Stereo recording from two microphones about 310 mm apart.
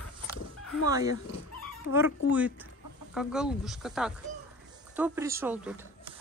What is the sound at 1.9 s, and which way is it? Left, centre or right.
Speech, left.